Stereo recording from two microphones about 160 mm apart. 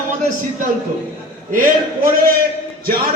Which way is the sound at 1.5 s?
60° right (ahead or behind).